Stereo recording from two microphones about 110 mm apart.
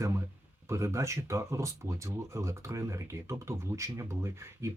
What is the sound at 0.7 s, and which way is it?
Speech, 25° right (ahead or behind).